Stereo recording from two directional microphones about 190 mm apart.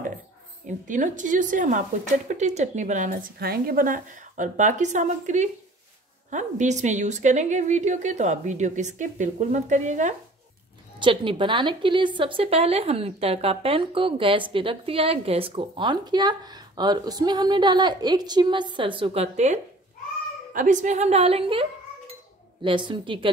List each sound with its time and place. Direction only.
0.7 s a woman's voice: 40° right (ahead or behind)
11.0 s a woman's voice: 25° right (ahead or behind)